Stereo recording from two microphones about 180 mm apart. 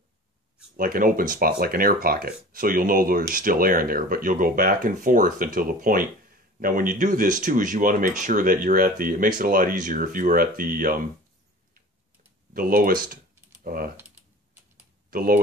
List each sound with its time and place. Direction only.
0.7 s speech: 50° right (ahead or behind)
12.5 s speech: 55° right (ahead or behind)
15.0 s speech: 55° right (ahead or behind)